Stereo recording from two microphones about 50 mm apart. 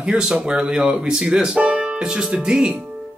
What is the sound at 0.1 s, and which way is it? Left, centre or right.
Speech, centre.